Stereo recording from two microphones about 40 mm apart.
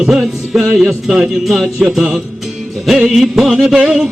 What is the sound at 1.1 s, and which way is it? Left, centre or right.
Music, centre.